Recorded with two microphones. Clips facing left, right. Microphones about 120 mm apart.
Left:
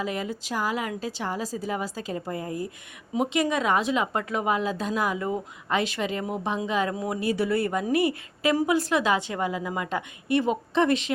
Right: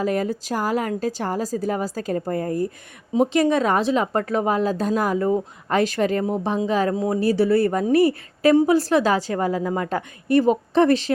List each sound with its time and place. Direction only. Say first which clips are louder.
0.0 s a woman's voice: right 7 dB; 45° right (ahead or behind)
3.2 s a woman's voice: right 6 dB; 35° right (ahead or behind)